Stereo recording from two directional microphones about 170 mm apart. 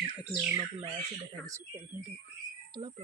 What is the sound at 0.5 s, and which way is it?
Speech, 35° right (ahead or behind).